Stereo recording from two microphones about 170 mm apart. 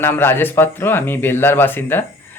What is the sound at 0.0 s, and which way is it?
Speech, 10° left (ahead or behind).